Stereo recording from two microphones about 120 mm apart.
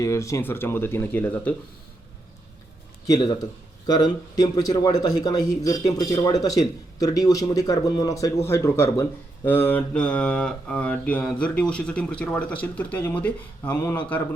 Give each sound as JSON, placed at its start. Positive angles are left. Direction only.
{"t": 0.0, "sound": "speech", "side_deg": 25}
{"t": 3.8, "sound": "speech", "side_deg": 35}